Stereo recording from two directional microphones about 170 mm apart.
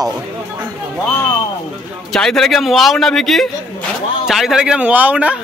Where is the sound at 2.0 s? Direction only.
5° left (ahead or behind).